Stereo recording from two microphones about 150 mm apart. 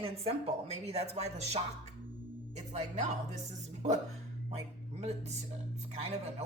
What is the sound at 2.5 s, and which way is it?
Speech, 50° right (ahead or behind).